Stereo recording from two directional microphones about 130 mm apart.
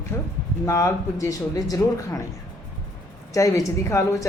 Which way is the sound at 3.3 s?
25° left (ahead or behind).